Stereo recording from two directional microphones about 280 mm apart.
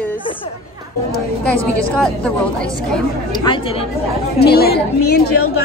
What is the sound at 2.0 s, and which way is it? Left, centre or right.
Speech, centre.